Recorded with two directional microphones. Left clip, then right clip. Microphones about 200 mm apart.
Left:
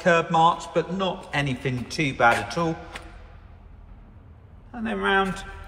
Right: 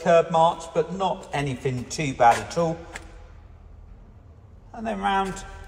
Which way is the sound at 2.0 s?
25° right (ahead or behind).